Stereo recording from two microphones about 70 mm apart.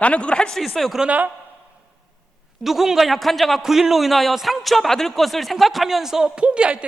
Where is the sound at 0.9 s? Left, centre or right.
Centre.